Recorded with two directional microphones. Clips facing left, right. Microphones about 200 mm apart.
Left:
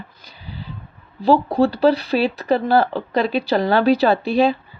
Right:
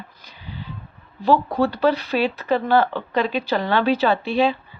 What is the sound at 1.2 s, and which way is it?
A woman's voice, 30° left (ahead or behind).